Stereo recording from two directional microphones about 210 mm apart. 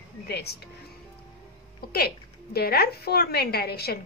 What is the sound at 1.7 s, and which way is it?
A woman's voice, 45° left (ahead or behind).